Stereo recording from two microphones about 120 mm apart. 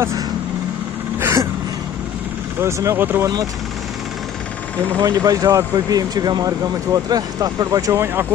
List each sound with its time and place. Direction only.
1.2 s a sound: 25° right (ahead or behind)
2.6 s speech: 25° right (ahead or behind)
5.0 s speech: 30° right (ahead or behind)